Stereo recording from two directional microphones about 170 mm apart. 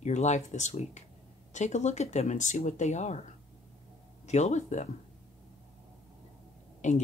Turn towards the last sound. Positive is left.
turn(degrees=45)  # may be behind; listen again after turning